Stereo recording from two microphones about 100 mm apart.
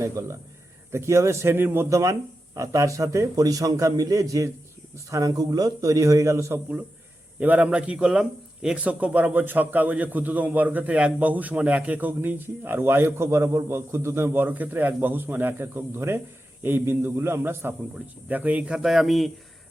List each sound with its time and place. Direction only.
0.0 s a man's voice: 30° right (ahead or behind)
1.9 s a man's voice: 30° right (ahead or behind)
7.3 s a man's voice: 15° right (ahead or behind)